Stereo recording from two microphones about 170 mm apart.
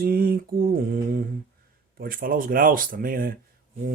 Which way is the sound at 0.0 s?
60° right (ahead or behind).